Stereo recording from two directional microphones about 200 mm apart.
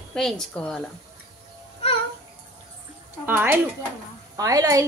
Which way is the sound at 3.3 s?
10° right (ahead or behind).